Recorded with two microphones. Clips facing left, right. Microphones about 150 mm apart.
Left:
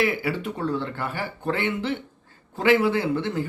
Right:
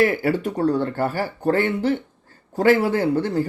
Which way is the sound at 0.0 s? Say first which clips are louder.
Right 5 dB; 45° right (ahead or behind).